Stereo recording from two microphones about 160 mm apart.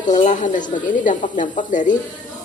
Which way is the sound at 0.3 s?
50° left (ahead or behind).